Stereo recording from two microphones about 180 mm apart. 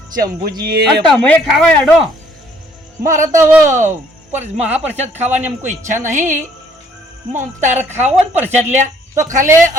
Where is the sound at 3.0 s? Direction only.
45° right (ahead or behind).